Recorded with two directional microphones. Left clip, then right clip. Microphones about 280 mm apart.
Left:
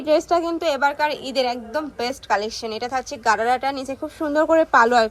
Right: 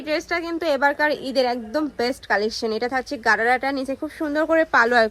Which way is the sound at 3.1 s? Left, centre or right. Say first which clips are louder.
Even; centre.